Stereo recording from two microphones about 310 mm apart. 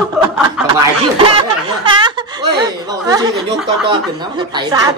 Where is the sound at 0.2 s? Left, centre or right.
Centre.